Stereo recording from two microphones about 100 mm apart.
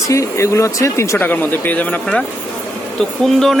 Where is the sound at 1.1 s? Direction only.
20° left (ahead or behind).